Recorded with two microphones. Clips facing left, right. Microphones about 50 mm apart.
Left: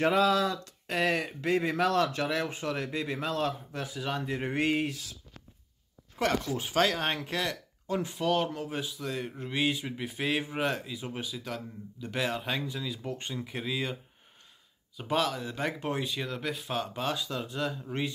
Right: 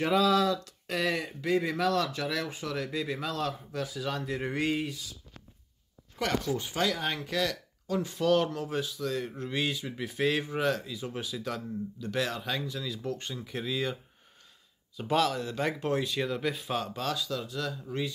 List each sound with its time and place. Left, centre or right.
0.0 s a sound: left
1.1 s a sound: left
2.6 s speech: left
4.6 s speech: left
6.8 s speech: left
7.1 s a sound: left
8.2 s speech: centre
10.0 s speech: centre
11.1 s speech: centre
12.0 s speech: centre
15.0 s speech: centre
16.2 s speech: centre
16.9 s speech: left